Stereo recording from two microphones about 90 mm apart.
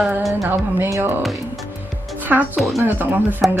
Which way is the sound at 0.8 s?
25° right (ahead or behind).